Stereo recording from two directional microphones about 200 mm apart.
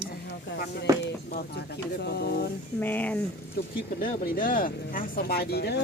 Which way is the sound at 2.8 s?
10° left (ahead or behind).